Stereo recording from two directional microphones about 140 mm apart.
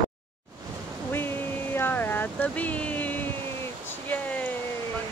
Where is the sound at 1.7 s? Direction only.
15° left (ahead or behind).